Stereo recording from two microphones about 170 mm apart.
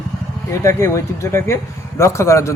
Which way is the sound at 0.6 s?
15° left (ahead or behind).